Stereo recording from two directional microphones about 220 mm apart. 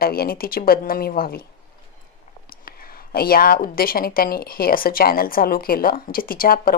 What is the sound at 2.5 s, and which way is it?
A woman's voice, 40° left (ahead or behind).